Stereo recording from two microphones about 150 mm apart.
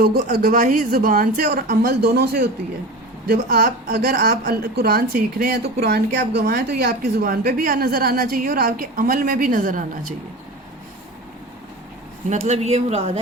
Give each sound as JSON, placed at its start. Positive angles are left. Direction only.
{"t": 0.0, "sound": "a woman's voice", "side_deg": -90}
{"t": 12.3, "sound": "speech", "side_deg": -50}